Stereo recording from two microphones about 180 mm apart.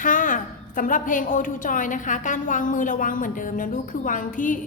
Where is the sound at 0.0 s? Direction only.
45° left (ahead or behind).